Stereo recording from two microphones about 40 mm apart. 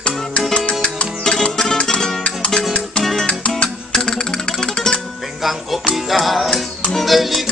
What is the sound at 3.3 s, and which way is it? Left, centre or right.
Music, left.